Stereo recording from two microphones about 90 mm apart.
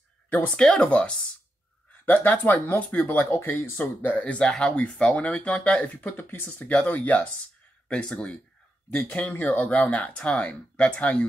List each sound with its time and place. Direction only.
0.6 s speech: 10° left (ahead or behind)